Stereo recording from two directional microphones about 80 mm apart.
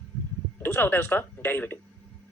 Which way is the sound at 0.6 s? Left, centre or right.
Left.